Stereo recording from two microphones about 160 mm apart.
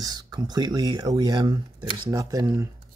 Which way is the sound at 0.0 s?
25° right (ahead or behind).